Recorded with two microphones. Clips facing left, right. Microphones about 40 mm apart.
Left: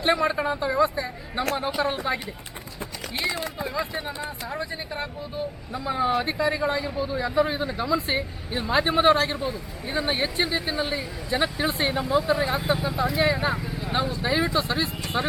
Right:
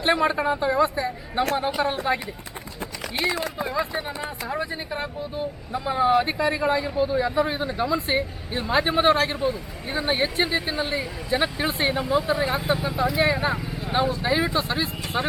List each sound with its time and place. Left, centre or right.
0.0 s speech: centre
3.6 s speech: centre